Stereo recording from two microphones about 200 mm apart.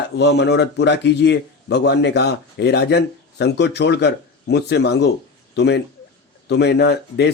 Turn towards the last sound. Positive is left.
turn(degrees=55)  # may be behind; listen again after turning